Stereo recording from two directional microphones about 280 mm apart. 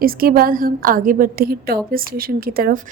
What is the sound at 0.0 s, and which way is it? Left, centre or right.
A woman's voice, right.